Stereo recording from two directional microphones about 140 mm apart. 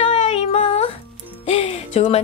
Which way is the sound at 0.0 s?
55° left (ahead or behind).